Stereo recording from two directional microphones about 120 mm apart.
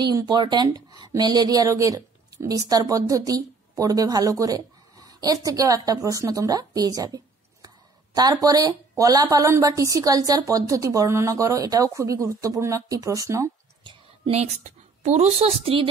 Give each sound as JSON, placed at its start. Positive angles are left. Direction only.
{"t": 0.0, "sound": "speech", "side_deg": -40}
{"t": 14.3, "sound": "a woman's voice", "side_deg": -70}